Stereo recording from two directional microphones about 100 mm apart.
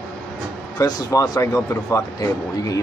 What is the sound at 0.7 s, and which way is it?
Speech, 35° left (ahead or behind).